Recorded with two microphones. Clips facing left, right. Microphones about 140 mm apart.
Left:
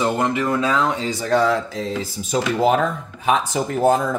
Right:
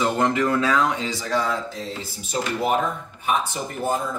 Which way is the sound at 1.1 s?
55° left (ahead or behind).